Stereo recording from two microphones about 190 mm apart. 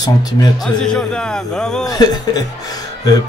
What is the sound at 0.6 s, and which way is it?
Speech, 5° left (ahead or behind).